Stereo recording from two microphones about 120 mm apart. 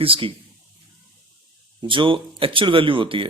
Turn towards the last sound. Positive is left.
turn(degrees=-45)  # may be behind; listen again after turning